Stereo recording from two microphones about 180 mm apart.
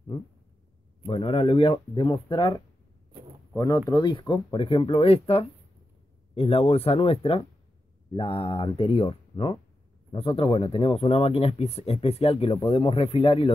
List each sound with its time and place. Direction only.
1.0 s speech: 30° left (ahead or behind)